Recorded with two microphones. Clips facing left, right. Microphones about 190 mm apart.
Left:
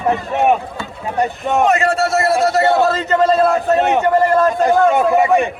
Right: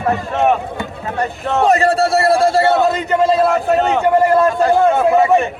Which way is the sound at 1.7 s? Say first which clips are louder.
Right 2 dB; 35° right (ahead or behind).